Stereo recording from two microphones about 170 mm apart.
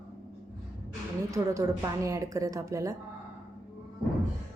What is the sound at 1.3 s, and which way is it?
A woman's voice, 20° right (ahead or behind).